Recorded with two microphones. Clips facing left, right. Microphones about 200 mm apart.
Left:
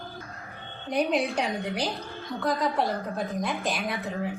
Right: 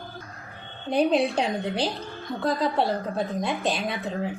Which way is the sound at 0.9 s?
30° right (ahead or behind).